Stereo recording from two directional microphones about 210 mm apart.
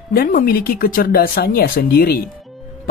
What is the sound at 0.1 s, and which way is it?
Speech, 40° left (ahead or behind).